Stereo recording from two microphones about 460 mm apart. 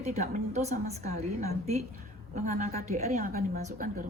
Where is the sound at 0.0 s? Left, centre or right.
Centre.